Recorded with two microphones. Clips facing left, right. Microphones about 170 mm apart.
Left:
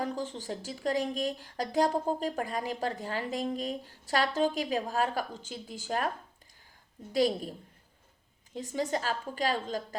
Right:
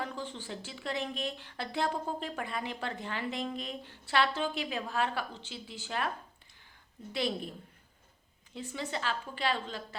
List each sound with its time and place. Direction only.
0.0 s a woman's voice: 40° left (ahead or behind)
7.1 s a woman's voice: 40° left (ahead or behind)
8.5 s a woman's voice: 40° left (ahead or behind)